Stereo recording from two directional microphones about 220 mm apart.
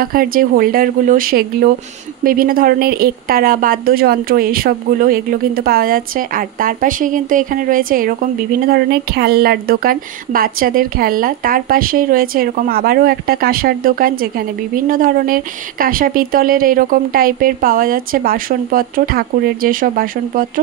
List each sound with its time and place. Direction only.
0.0 s a woman's voice: 40° right (ahead or behind)